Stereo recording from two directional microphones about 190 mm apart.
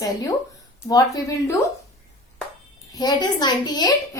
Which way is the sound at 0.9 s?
20° left (ahead or behind).